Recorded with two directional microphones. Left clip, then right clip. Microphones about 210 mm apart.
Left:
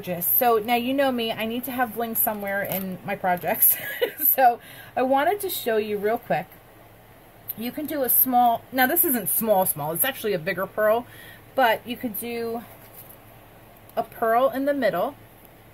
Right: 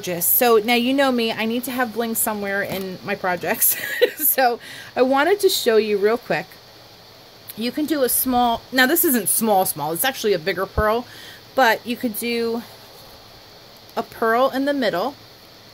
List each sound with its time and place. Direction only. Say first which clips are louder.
0.0 s a woman's voice: right 3 dB; 45° right (ahead or behind)
7.6 s a woman's voice: right 7 dB; 50° right (ahead or behind)
13.9 s a woman's voice: right 2 dB; 40° right (ahead or behind)